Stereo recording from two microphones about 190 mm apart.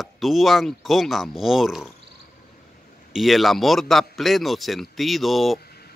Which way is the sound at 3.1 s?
Centre (ahead or behind).